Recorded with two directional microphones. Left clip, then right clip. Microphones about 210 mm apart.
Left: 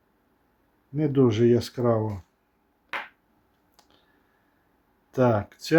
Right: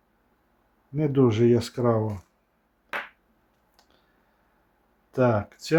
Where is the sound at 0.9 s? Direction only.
5° left (ahead or behind).